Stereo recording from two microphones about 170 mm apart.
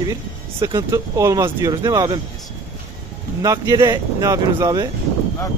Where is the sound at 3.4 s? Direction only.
20° right (ahead or behind).